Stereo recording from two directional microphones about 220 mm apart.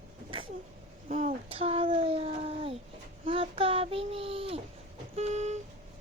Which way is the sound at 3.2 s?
25° right (ahead or behind).